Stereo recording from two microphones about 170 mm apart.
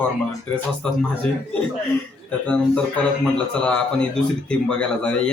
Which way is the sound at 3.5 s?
5° left (ahead or behind).